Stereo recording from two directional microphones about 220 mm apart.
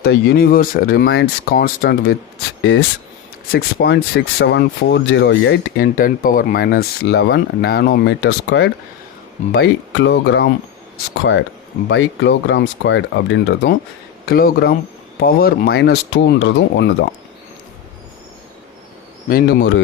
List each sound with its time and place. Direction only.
0.0 s speech: 45° left (ahead or behind)
3.5 s speech: 45° left (ahead or behind)
11.9 s speech: 55° left (ahead or behind)
19.3 s speech: 40° left (ahead or behind)